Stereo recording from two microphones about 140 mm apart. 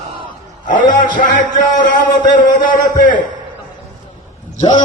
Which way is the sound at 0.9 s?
70° left (ahead or behind).